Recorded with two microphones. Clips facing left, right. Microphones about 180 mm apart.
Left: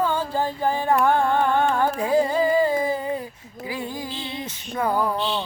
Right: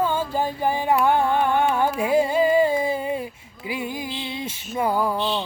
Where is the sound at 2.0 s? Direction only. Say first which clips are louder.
Right 1 dB; 10° right (ahead or behind).